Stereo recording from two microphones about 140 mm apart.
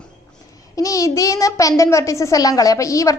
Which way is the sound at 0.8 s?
25° left (ahead or behind).